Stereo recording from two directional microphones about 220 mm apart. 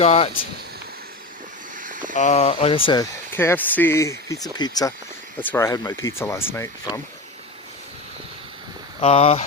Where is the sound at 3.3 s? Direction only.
10° left (ahead or behind).